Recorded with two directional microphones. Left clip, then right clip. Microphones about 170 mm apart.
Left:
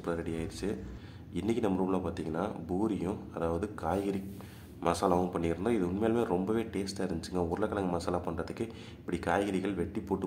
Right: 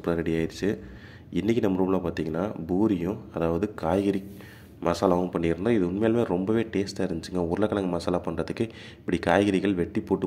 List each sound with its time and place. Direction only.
0.0 s speech: 30° right (ahead or behind)